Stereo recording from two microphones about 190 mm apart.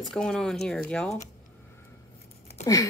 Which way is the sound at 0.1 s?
5° left (ahead or behind).